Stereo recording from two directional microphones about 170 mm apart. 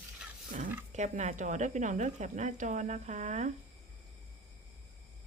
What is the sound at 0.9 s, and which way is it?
Speech, 45° right (ahead or behind).